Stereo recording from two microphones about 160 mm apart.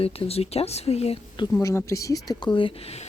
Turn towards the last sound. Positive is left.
turn(degrees=40)  # may be behind; listen again after turning